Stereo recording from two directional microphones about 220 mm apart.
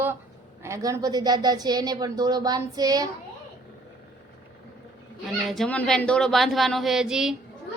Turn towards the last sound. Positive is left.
turn(degrees=-5)  # may be behind; listen again after turning